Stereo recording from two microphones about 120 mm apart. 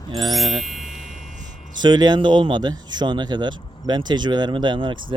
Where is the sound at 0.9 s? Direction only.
90° right.